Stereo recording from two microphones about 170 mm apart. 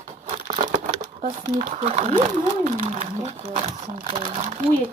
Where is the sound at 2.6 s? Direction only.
40° right (ahead or behind).